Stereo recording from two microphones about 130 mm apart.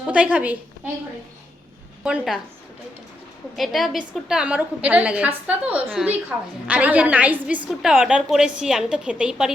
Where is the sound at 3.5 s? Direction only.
Centre (ahead or behind).